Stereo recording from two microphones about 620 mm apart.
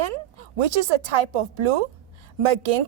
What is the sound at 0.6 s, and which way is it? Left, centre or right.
Speech, right.